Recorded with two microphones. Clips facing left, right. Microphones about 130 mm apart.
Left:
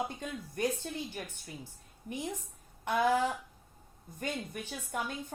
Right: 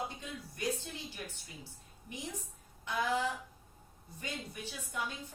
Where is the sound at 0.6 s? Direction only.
55° left (ahead or behind).